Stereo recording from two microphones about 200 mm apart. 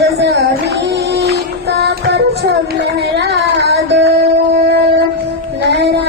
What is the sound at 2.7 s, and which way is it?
Child singing, 55° right (ahead or behind).